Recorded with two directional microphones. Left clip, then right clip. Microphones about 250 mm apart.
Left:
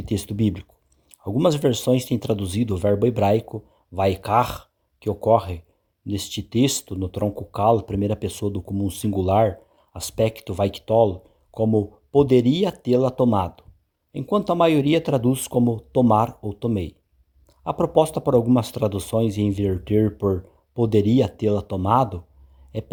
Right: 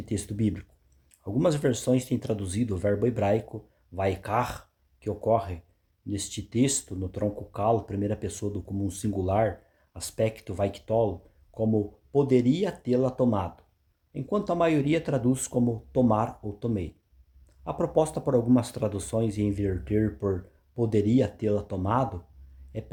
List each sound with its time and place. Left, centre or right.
0.0 s speech: left